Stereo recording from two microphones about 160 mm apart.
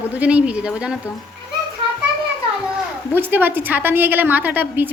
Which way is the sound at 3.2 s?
10° right (ahead or behind).